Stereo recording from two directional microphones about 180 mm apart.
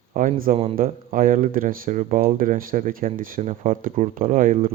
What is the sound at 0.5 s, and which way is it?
Speech, 30° right (ahead or behind).